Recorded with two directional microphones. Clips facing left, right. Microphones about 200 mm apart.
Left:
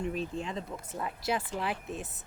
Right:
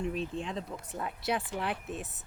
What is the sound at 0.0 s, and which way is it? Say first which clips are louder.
Speech: even; centre (ahead or behind).